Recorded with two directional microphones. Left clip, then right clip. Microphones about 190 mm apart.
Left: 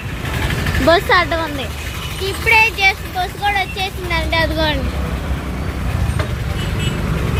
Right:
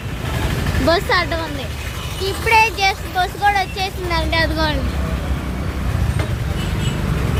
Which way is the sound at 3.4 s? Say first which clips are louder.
Right 1 dB; 45° right (ahead or behind).